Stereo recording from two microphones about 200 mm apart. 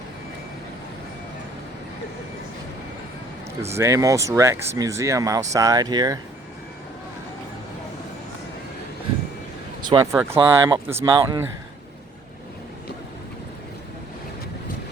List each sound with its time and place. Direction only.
3.7 s speech: 15° right (ahead or behind)
9.8 s speech: 20° right (ahead or behind)